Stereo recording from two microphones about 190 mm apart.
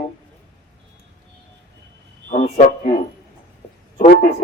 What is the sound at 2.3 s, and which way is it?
Speech, 40° left (ahead or behind).